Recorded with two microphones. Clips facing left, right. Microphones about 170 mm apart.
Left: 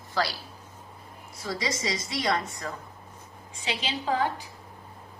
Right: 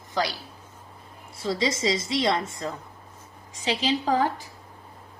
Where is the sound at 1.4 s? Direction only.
25° right (ahead or behind).